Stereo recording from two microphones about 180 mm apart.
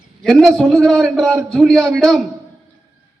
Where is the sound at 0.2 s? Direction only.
Centre (ahead or behind).